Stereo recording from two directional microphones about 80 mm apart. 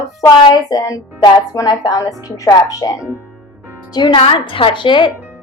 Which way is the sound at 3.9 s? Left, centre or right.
Left.